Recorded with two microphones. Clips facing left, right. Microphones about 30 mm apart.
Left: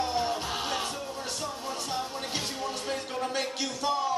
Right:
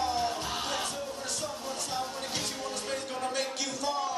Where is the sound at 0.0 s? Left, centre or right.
Centre.